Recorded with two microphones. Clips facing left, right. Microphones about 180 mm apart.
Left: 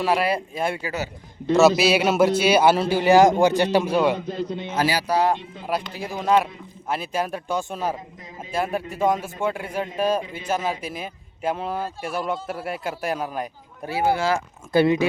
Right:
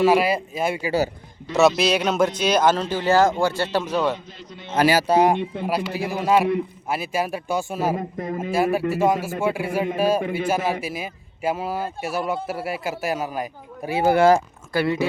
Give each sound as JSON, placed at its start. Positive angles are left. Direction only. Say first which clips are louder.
{"t": 0.0, "sound": "speech", "louder": "right 4 dB", "side_deg": -5}
{"t": 0.9, "sound": "a man's voice", "louder": "right 7 dB", "side_deg": -35}
{"t": 1.5, "sound": "speech", "louder": "left 1 dB", "side_deg": 5}
{"t": 4.4, "sound": "a man's voice", "louder": "left 13 dB", "side_deg": 30}
{"t": 4.8, "sound": "speech", "louder": "right 5 dB", "side_deg": -55}
{"t": 5.0, "sound": "speech", "louder": "right 4 dB", "side_deg": -20}
{"t": 5.6, "sound": "speech", "louder": "even", "side_deg": -5}
{"t": 7.9, "sound": "speech", "louder": "right 11 dB", "side_deg": -55}
{"t": 8.5, "sound": "speech", "louder": "right 4 dB", "side_deg": -10}
{"t": 14.0, "sound": "speech", "louder": "right 6 dB", "side_deg": -50}
{"t": 14.7, "sound": "speech", "louder": "left 4 dB", "side_deg": 20}